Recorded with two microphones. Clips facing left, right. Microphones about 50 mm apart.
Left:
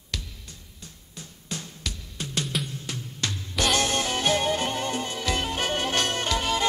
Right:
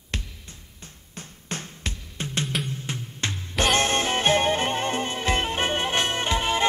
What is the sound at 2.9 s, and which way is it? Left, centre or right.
Music, right.